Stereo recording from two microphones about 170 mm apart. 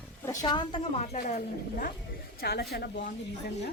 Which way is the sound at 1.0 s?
50° left (ahead or behind).